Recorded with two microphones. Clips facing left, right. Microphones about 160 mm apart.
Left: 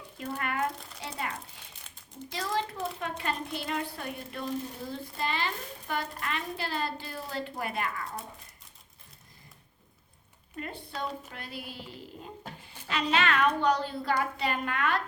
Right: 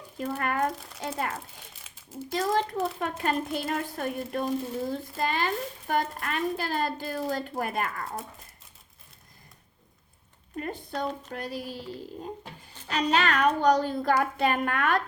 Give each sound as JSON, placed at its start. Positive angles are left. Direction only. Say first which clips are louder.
{"t": 0.3, "sound": "a woman's voice", "louder": "right 3 dB", "side_deg": -45}
{"t": 10.6, "sound": "a woman's voice", "louder": "right 5 dB", "side_deg": -45}
{"t": 12.9, "sound": "a woman's voice", "louder": "right 2 dB", "side_deg": -40}